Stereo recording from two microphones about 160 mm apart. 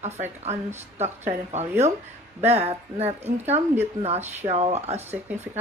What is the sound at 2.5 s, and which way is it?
Speech, 40° right (ahead or behind).